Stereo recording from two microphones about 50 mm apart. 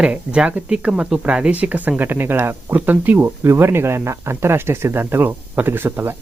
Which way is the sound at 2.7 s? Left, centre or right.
Right.